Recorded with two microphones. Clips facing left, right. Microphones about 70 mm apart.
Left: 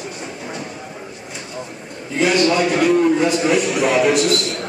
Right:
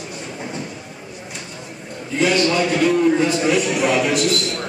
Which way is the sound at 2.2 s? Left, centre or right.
Centre.